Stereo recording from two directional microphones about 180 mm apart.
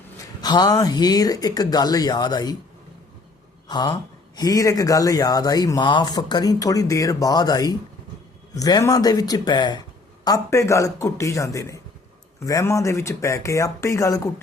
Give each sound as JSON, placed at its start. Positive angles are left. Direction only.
{"t": 0.4, "sound": "speech", "side_deg": 20}
{"t": 3.7, "sound": "speech", "side_deg": 25}